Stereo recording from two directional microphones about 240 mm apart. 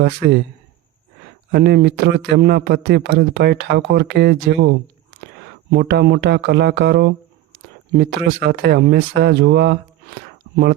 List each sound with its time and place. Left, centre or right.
0.0 s speech: right
1.5 s speech: right
5.7 s speech: right
10.2 s a sound: right